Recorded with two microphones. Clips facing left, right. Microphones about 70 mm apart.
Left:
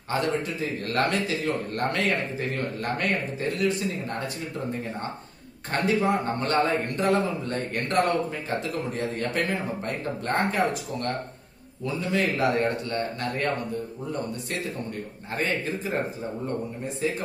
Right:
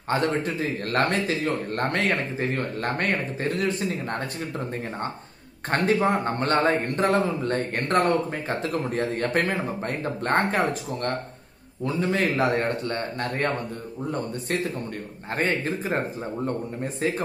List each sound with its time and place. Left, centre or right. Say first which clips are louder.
0.1 s speech: right 2 dB; right
5.7 s a man's voice: right 2 dB; right
15.3 s a man's voice: right 2 dB; right
17.0 s a man's voice: right 2 dB; right